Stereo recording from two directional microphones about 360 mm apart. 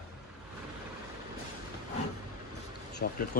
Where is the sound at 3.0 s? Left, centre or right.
Left.